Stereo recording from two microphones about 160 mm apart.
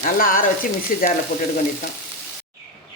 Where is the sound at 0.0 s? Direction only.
60° left (ahead or behind).